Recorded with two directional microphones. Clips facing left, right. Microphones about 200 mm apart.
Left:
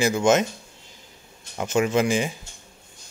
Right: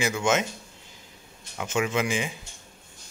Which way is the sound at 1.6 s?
40° left (ahead or behind).